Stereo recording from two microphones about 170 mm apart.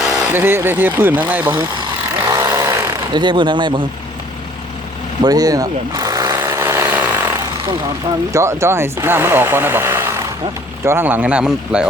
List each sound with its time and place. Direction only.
0.0 s vehicle: 5° right (ahead or behind)
0.4 s speech: 15° right (ahead or behind)
1.5 s speech: 30° right (ahead or behind)
2.3 s chainsaw: 15° right (ahead or behind)
3.1 s speech: 25° right (ahead or behind)
5.2 s a sound: 20° right (ahead or behind)
8.3 s speech: 15° right (ahead or behind)